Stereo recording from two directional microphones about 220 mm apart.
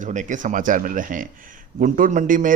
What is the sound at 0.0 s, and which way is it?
A man's voice, 35° right (ahead or behind).